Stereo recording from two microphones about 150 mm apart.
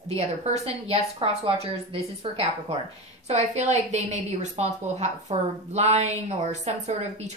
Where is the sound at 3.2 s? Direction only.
45° right (ahead or behind).